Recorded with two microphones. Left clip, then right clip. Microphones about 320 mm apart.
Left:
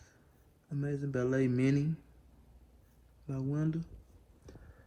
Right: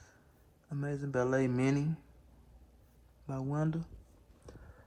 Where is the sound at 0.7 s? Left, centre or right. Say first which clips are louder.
Left 1 dB; right.